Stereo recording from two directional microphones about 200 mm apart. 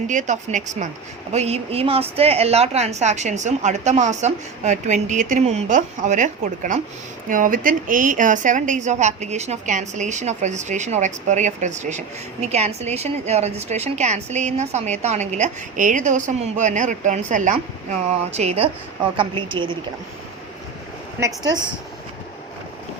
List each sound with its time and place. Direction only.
0.1 s a woman's voice: 40° right (ahead or behind)
21.2 s a woman's voice: 20° right (ahead or behind)